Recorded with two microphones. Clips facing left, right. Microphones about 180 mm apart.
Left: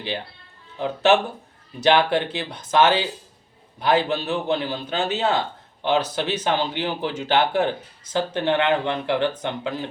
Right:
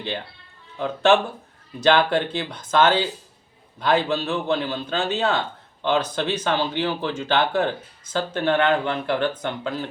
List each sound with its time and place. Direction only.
0.8 s speech: 15° left (ahead or behind)